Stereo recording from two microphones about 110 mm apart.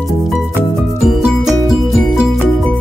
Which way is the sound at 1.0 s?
5° right (ahead or behind).